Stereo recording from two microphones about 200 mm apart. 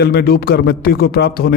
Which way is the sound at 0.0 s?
50° left (ahead or behind).